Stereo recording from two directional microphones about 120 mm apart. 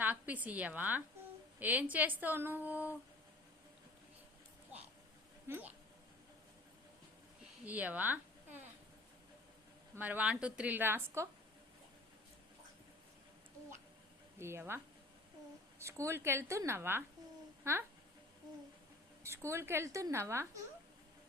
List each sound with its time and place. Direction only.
0.0 s a woman's voice: 15° right (ahead or behind)
5.5 s a woman's voice: 15° right (ahead or behind)
7.6 s a woman's voice: 15° right (ahead or behind)
9.9 s a woman's voice: 15° right (ahead or behind)
14.3 s a woman's voice: 20° right (ahead or behind)
15.8 s a woman's voice: 25° right (ahead or behind)
19.2 s a woman's voice: 20° right (ahead or behind)